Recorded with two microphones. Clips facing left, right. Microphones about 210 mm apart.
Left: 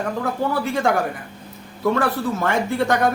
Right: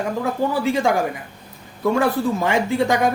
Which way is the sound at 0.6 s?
15° right (ahead or behind).